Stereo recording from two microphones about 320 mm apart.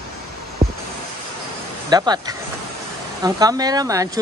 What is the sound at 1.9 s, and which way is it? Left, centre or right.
Speech, centre.